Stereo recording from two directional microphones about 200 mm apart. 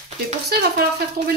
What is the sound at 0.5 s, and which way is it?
Speech, 50° right (ahead or behind).